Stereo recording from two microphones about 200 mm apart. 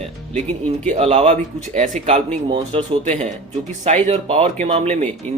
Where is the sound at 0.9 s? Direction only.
30° right (ahead or behind).